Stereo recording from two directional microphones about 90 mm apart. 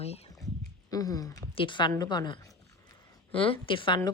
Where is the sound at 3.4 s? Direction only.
70° left (ahead or behind).